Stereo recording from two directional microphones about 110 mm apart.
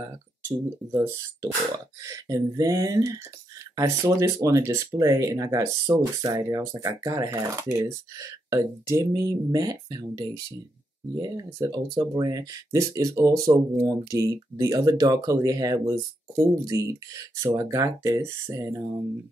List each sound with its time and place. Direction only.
0.0 s speech: 25° right (ahead or behind)